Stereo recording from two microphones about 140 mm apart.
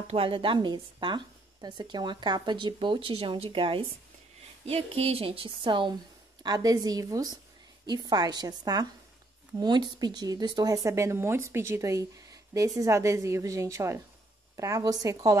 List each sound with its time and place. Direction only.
0.0 s speech: 45° right (ahead or behind); by 15.3 s 25° right (ahead or behind)